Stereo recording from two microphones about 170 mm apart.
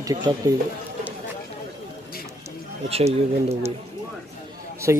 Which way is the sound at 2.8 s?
35° right (ahead or behind).